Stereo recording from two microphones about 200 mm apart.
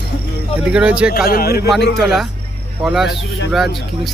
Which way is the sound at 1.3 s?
50° left (ahead or behind).